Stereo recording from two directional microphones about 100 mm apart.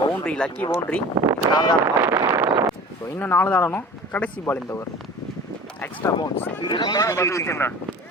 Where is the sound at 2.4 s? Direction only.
25° right (ahead or behind).